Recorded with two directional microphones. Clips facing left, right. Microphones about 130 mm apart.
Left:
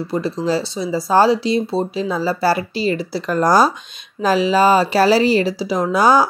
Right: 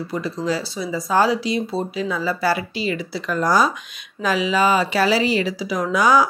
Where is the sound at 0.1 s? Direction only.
30° left (ahead or behind).